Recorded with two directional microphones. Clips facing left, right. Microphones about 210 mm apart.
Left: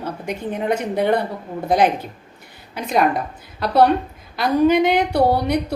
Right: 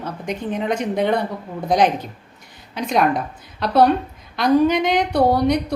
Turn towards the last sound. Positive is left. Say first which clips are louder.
# right 1 dB
turn(degrees=5)  # may be behind; listen again after turning